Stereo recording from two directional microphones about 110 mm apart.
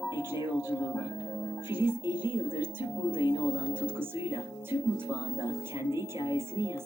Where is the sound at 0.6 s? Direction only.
20° right (ahead or behind).